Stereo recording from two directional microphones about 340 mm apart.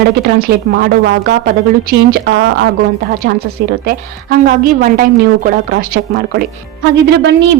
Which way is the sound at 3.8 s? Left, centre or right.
Right.